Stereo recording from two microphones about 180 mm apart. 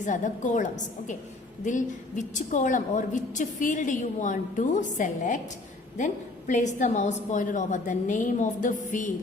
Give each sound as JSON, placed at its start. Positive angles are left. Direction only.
{"t": 0.0, "sound": "a woman's voice", "side_deg": 45}
{"t": 6.5, "sound": "a woman's voice", "side_deg": 45}